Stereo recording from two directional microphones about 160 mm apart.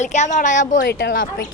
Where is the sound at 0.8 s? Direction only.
85° left.